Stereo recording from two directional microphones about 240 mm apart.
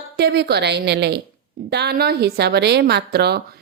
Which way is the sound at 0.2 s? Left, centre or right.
Right.